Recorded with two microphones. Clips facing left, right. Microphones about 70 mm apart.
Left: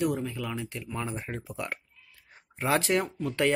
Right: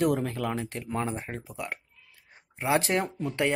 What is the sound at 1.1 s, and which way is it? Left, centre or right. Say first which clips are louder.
Speech: right 1 dB; right.